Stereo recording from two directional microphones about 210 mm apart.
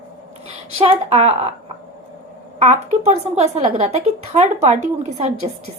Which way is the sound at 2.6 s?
30° right (ahead or behind).